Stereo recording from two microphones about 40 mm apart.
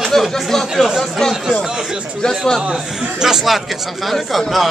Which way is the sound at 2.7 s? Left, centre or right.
Centre.